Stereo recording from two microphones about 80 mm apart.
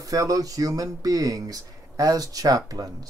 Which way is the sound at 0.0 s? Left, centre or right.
Right.